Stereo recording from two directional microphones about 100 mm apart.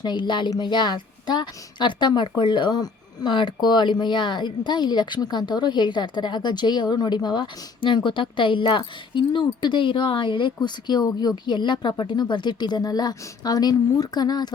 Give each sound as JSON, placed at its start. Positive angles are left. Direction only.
{"t": 0.0, "sound": "a woman's voice", "side_deg": 50}